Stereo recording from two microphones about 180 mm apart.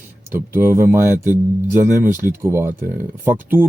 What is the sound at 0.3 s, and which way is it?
Speech, 15° right (ahead or behind).